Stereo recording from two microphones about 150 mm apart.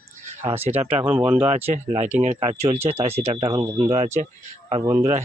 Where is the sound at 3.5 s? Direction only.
25° right (ahead or behind).